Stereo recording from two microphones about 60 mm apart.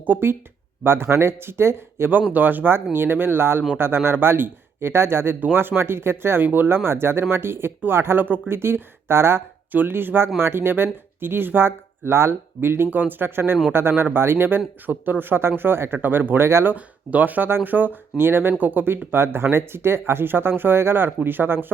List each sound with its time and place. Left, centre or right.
0.0 s speech: right
16.5 s speech: right
16.7 s speech: right
19.1 s speech: right